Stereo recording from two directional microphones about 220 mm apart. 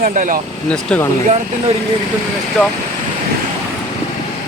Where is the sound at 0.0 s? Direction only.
35° right (ahead or behind).